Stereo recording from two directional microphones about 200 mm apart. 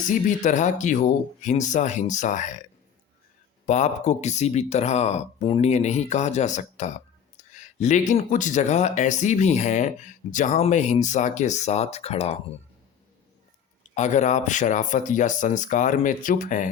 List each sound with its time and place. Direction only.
0.1 s speech: 40° left (ahead or behind)
3.7 s speech: 35° left (ahead or behind)
13.9 s speech: 35° left (ahead or behind)